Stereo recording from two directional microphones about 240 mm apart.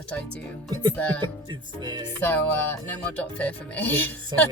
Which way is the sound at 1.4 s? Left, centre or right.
Centre.